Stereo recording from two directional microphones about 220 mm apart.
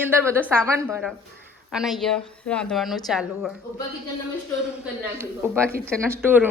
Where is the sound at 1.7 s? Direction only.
Centre (ahead or behind).